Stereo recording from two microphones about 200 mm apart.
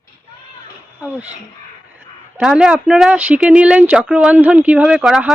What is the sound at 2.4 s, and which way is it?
Speech, 5° right (ahead or behind).